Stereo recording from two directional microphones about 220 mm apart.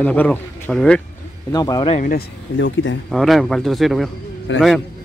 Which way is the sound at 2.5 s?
60° left (ahead or behind).